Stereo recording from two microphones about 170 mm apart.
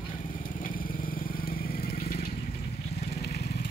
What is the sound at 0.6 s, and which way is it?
Vehicle, 55° left (ahead or behind).